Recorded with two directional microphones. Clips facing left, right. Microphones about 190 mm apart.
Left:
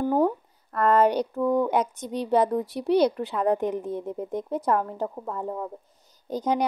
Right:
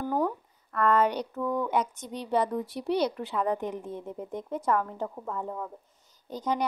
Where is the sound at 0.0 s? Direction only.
25° left (ahead or behind).